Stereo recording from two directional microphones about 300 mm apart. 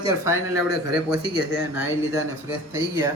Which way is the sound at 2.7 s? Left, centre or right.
Centre.